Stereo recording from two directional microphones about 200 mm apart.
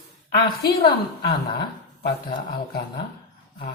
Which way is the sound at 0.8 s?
20° left (ahead or behind).